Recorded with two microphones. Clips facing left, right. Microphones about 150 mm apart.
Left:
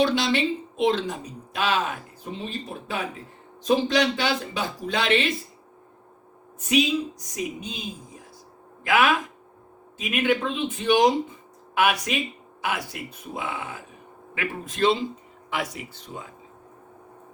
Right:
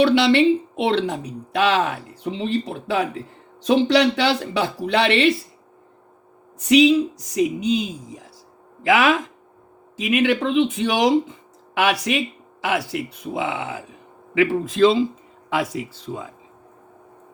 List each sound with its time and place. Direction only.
0.0 s speech: 70° right (ahead or behind)
6.7 s a woman's voice: 80° right
11.8 s a woman's voice: 80° right